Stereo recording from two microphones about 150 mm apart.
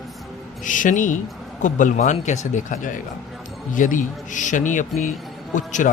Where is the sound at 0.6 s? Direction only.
60° left (ahead or behind).